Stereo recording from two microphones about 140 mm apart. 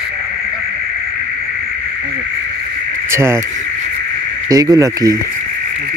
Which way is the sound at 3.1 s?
20° right (ahead or behind).